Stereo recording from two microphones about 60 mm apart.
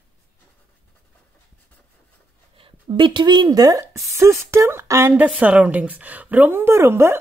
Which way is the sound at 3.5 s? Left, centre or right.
Right.